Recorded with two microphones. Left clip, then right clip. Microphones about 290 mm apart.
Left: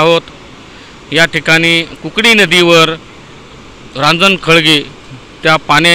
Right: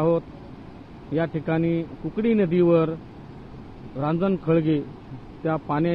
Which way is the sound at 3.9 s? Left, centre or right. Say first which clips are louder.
Left 17 dB; left.